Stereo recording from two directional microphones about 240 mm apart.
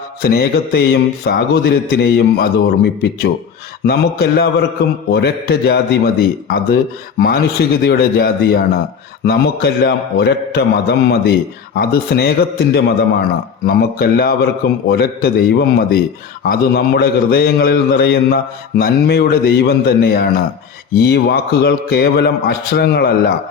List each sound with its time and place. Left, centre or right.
0.2 s a man's voice: left